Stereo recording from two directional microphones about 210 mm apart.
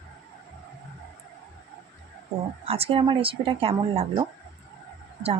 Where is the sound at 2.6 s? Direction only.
30° right (ahead or behind).